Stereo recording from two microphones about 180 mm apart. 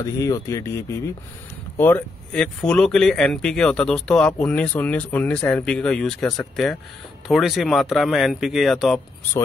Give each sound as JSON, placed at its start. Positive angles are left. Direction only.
{"t": 0.0, "sound": "speech", "side_deg": 20}